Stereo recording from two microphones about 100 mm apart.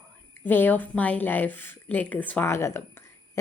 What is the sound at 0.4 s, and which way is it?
Speech, 20° left (ahead or behind).